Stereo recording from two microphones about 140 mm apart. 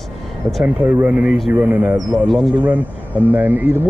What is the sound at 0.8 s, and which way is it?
Speech, 15° right (ahead or behind).